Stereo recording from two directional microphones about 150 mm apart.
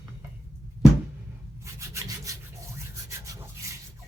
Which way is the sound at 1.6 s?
20° right (ahead or behind).